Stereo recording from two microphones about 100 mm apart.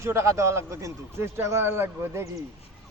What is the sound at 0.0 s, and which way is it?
A man's voice, 30° right (ahead or behind).